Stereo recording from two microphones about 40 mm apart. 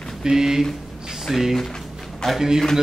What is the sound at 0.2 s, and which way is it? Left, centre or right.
Speech, centre.